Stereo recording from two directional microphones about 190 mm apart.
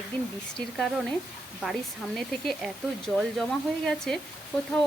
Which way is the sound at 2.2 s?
Centre (ahead or behind).